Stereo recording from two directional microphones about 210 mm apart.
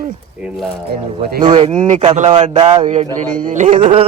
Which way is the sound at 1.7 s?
35° right (ahead or behind).